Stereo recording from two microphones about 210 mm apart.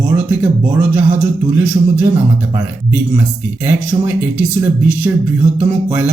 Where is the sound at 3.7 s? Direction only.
10° right (ahead or behind).